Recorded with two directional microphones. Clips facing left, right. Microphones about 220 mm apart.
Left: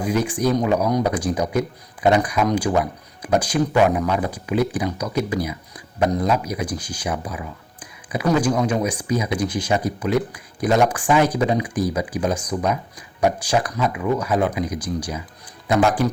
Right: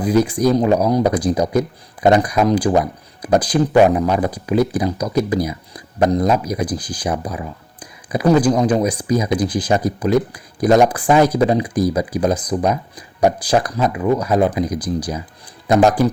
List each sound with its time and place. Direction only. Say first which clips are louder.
0.0 s speech: right 5 dB; 35° right (ahead or behind)